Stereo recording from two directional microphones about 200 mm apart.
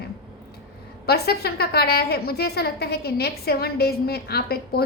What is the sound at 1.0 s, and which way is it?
A woman's voice, 50° left (ahead or behind).